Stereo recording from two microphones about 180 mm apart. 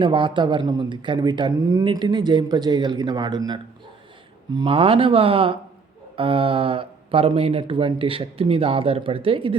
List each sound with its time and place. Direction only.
0.0 s speech: 25° right (ahead or behind)